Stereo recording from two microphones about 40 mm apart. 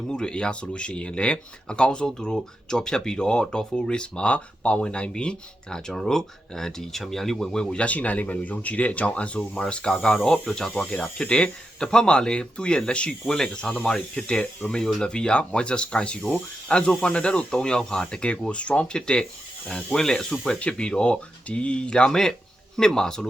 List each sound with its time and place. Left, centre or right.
0.1 s speech: left
5.9 s speech: centre
7.7 s speech: left
7.9 s speech: left; by 10.7 s centre
10.8 s speech: left
20.6 s speech: left